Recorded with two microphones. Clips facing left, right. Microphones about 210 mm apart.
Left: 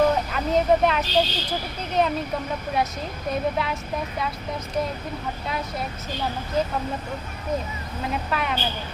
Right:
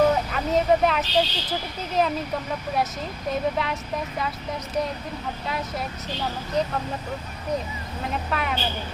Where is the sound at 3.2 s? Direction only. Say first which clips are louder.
Even; centre (ahead or behind).